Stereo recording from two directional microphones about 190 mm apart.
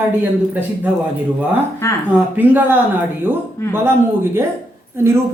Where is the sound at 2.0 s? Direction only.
10° right (ahead or behind).